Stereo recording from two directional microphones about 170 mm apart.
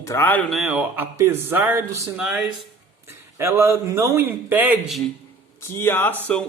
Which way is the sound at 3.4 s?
15° right (ahead or behind).